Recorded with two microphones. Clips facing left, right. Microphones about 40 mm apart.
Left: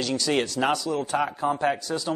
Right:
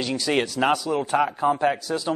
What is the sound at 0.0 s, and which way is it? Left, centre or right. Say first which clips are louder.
Speech: right 1 dB; centre.